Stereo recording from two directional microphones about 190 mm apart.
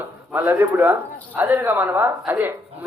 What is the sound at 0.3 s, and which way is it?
Speech, 10° right (ahead or behind).